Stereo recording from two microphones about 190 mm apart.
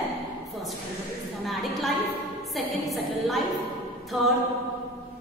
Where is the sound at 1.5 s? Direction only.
Centre (ahead or behind).